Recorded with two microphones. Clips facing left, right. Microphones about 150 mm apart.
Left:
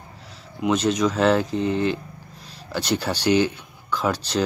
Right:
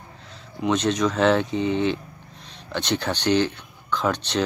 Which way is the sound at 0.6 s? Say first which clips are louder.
Left 1 dB; 5° left (ahead or behind).